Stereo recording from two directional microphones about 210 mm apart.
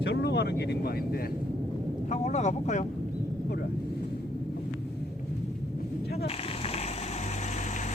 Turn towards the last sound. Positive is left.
turn(degrees=35)  # may be behind; listen again after turning